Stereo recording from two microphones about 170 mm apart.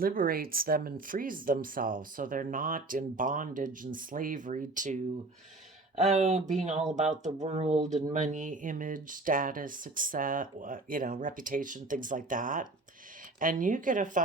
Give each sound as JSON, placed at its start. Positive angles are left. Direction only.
{"t": 0.0, "sound": "speech", "side_deg": -55}
{"t": 6.0, "sound": "speech", "side_deg": -45}